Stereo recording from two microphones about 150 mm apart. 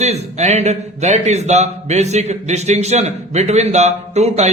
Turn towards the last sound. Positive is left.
turn(degrees=-45)  # may be behind; listen again after turning